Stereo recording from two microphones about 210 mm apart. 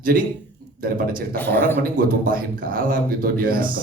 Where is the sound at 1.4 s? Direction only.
10° left (ahead or behind).